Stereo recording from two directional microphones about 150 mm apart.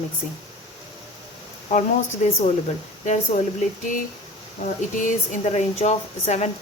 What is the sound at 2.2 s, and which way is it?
Speech, 55° left (ahead or behind).